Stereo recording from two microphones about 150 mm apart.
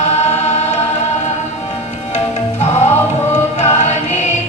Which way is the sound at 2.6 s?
45° left (ahead or behind).